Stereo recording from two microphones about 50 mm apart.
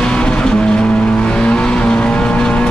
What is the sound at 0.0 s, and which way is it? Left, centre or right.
Vehicle, centre.